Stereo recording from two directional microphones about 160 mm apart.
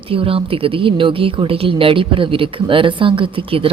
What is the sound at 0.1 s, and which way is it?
A woman's voice, 35° right (ahead or behind).